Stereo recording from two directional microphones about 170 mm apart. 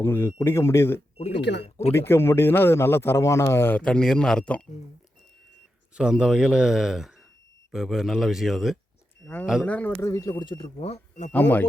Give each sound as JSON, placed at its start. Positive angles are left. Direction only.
{"t": 0.0, "sound": "speech", "side_deg": 15}
{"t": 1.3, "sound": "speech", "side_deg": 90}
{"t": 2.0, "sound": "speech", "side_deg": 15}
{"t": 6.0, "sound": "speech", "side_deg": -5}
{"t": 9.2, "sound": "speech", "side_deg": 10}
{"t": 11.3, "sound": "speech", "side_deg": 10}